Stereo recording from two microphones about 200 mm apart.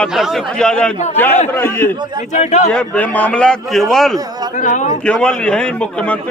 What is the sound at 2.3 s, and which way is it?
Speech, 35° left (ahead or behind).